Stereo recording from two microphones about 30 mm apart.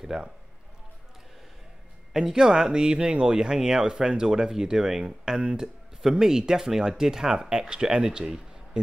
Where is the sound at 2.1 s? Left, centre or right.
Centre.